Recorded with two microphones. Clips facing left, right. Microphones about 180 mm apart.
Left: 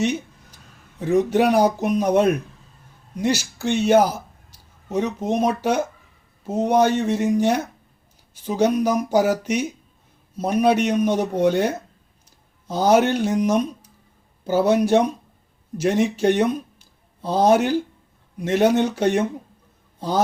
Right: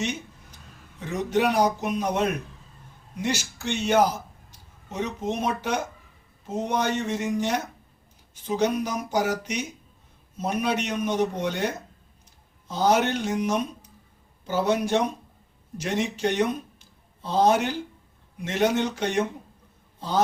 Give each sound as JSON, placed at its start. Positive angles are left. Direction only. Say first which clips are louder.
{"t": 0.9, "sound": "a man's voice", "louder": "left 7 dB", "side_deg": 45}
{"t": 12.6, "sound": "a man's voice", "louder": "left 5 dB", "side_deg": 45}